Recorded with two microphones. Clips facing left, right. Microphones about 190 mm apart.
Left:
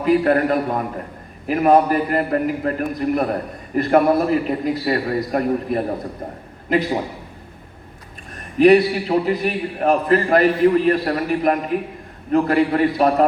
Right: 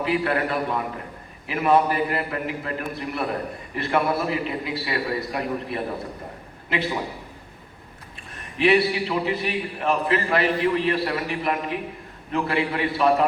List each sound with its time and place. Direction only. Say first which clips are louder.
0.0 s a man's voice: left 7 dB; 45° left (ahead or behind)
8.5 s a man's voice: left 7 dB; 45° left (ahead or behind)